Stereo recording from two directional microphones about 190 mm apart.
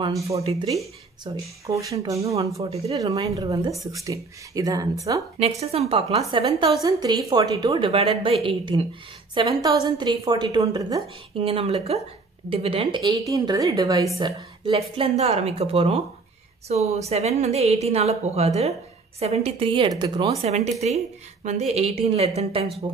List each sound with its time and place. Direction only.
0.0 s speech: 15° right (ahead or behind)
0.4 s a woman's voice: 30° right (ahead or behind)
1.2 s a woman's voice: 20° right (ahead or behind)
5.6 s a woman's voice: 35° right (ahead or behind)
20.4 s a woman's voice: 35° right (ahead or behind)